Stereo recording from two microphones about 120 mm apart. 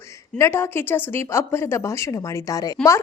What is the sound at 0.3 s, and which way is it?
A woman's voice, 20° left (ahead or behind).